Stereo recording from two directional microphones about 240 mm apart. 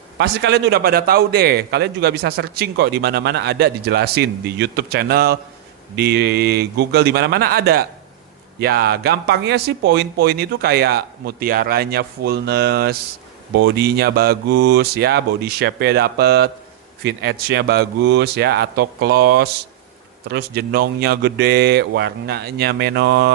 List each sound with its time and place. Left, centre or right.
0.2 s a man's voice: right